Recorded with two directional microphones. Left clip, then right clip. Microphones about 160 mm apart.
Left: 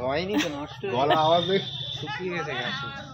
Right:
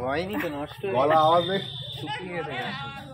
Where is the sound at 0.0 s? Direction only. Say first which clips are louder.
Left 1 dB; 10° left (ahead or behind).